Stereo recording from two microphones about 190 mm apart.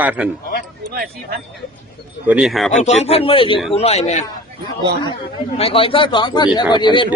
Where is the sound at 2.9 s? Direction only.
35° left (ahead or behind).